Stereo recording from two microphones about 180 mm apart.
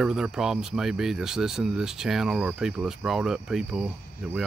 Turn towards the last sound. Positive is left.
turn(degrees=-5)  # may be behind; listen again after turning